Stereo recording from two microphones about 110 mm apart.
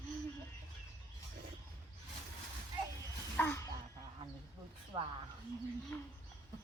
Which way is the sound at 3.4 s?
15° left (ahead or behind).